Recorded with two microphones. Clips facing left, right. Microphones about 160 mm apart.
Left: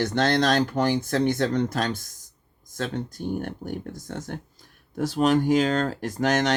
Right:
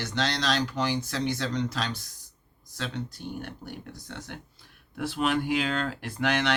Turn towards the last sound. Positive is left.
turn(degrees=40)  # may be behind; listen again after turning